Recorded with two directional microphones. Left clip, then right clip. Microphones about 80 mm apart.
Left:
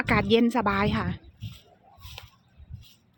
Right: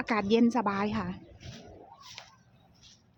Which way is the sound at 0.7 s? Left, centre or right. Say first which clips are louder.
Left 5 dB; left.